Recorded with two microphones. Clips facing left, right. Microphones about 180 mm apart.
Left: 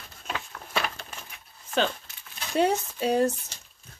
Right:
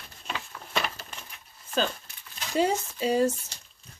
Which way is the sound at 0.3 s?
Centre (ahead or behind).